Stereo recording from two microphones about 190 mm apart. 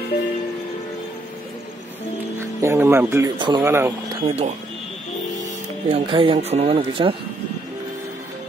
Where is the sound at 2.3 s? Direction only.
10° right (ahead or behind).